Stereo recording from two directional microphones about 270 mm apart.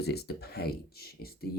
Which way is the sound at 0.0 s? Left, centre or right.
Left.